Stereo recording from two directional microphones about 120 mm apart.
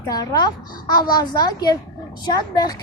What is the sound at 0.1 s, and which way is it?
Speech, 35° left (ahead or behind).